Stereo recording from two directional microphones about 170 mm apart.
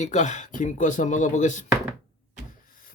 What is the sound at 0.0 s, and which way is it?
Speech, 45° left (ahead or behind).